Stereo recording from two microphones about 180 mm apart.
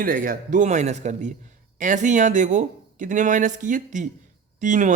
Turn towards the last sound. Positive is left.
turn(degrees=-45)  # may be behind; listen again after turning